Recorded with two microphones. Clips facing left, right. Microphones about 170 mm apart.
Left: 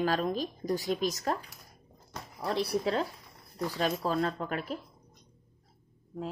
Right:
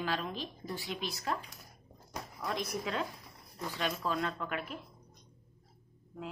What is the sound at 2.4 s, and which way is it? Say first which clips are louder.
A woman's voice: left 7 dB; 35° left (ahead or behind).